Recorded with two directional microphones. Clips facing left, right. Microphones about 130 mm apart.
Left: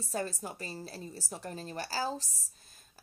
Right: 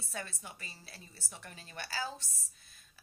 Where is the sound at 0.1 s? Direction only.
40° left (ahead or behind).